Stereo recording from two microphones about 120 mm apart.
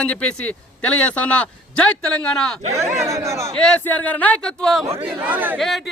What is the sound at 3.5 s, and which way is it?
Speech, 10° left (ahead or behind).